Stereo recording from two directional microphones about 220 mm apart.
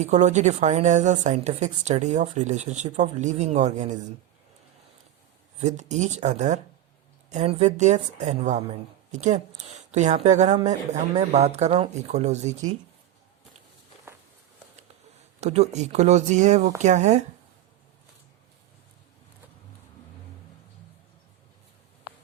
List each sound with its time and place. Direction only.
0.0 s speech: 30° right (ahead or behind)
5.5 s speech: 30° right (ahead or behind)
15.4 s speech: 30° right (ahead or behind)